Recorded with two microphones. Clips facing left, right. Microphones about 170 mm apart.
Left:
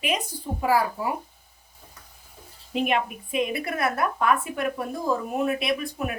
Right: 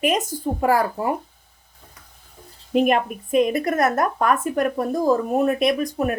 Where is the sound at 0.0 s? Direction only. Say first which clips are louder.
Right 7 dB; 45° right (ahead or behind).